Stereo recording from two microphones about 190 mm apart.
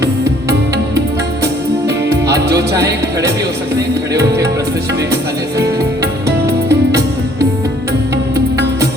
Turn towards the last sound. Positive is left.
turn(degrees=-60)  # may be behind; listen again after turning